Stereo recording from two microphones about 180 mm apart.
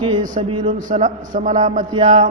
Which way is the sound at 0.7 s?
45° right (ahead or behind).